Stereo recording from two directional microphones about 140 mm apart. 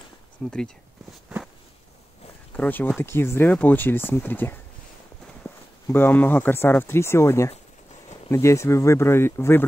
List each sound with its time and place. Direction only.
0.4 s speech: centre (ahead or behind)
2.5 s speech: 10° left (ahead or behind)